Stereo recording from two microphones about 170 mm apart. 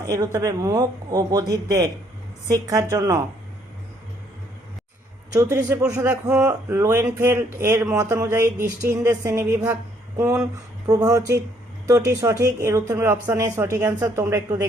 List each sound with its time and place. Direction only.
0.0 s a man's voice: 20° right (ahead or behind)
5.3 s a man's voice: 15° right (ahead or behind)